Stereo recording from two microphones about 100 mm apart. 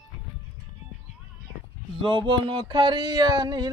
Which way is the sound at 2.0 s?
55° right (ahead or behind).